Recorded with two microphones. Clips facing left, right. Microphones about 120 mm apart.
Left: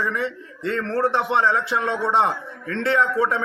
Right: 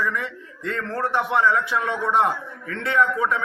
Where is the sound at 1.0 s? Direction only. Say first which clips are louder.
Even; 30° left (ahead or behind).